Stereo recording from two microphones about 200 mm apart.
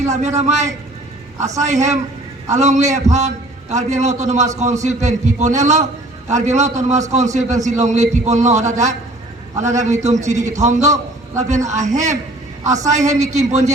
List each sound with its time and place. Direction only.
0.0 s a man's voice: 35° right (ahead or behind)